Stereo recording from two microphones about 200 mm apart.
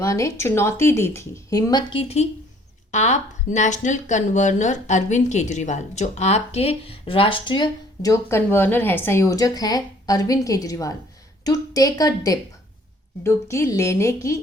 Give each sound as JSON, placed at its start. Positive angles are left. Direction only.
{"t": 0.0, "sound": "speech", "side_deg": 15}